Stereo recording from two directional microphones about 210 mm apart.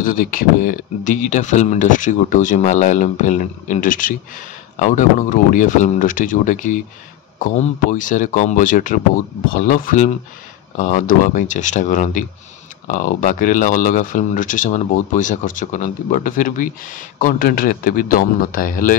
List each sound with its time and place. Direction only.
0.0 s speech: 40° left (ahead or behind)
7.9 s speech: 35° left (ahead or behind)